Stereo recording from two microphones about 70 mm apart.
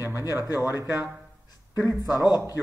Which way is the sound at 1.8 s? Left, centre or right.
Left.